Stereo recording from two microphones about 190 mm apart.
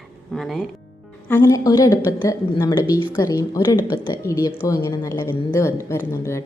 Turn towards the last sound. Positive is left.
turn(degrees=15)  # may be behind; listen again after turning